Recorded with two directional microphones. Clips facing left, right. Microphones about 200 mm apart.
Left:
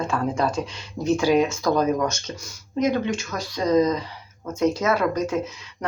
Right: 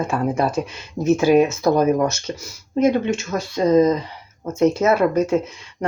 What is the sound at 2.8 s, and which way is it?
Speech, 25° right (ahead or behind).